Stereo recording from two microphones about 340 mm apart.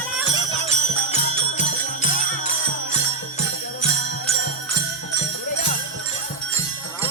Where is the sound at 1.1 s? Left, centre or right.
Left.